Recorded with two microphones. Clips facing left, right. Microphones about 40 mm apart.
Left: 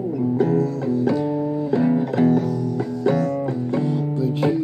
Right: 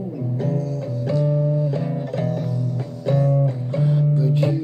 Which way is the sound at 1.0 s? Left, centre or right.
Centre.